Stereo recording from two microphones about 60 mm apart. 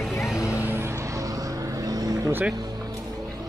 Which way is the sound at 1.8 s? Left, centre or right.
Right.